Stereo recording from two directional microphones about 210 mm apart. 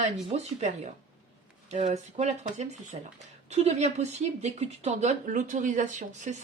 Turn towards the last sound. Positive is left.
turn(degrees=-35)  # may be behind; listen again after turning